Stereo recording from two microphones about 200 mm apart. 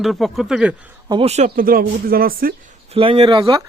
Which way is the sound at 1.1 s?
30° right (ahead or behind).